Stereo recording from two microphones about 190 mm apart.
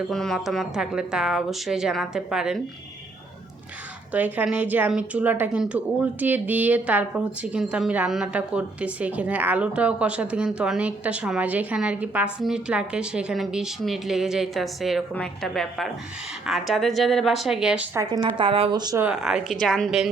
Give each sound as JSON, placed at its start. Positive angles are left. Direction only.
{"t": 0.1, "sound": "a woman's voice", "side_deg": 0}
{"t": 4.1, "sound": "a woman's voice", "side_deg": -10}
{"t": 17.9, "sound": "speech", "side_deg": -20}
{"t": 19.0, "sound": "a woman's voice", "side_deg": -5}